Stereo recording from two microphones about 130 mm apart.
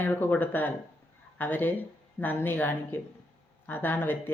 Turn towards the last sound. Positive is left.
turn(degrees=15)  # may be behind; listen again after turning